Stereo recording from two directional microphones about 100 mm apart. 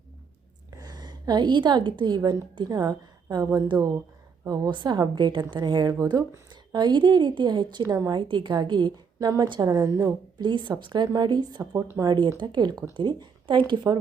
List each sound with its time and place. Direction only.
0.8 s a woman's voice: 45° right (ahead or behind)
7.9 s speech: 35° right (ahead or behind)
8.3 s a woman's voice: 50° right (ahead or behind)
9.2 s a woman's voice: 40° right (ahead or behind)
11.6 s speech: 30° right (ahead or behind)
12.4 s a woman's voice: 45° right (ahead or behind)